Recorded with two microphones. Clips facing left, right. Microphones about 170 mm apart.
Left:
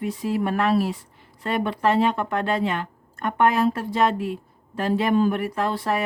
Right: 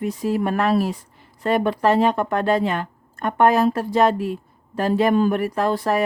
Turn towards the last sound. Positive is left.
turn(degrees=-40)  # may be behind; listen again after turning